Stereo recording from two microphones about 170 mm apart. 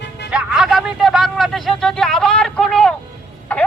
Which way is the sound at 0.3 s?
5° right (ahead or behind).